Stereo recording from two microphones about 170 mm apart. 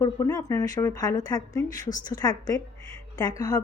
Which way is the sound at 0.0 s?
20° left (ahead or behind).